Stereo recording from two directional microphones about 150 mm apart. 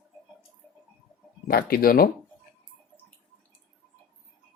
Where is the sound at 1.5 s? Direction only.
80° left.